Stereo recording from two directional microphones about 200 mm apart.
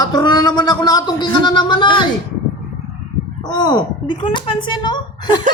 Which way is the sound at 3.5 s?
20° left (ahead or behind).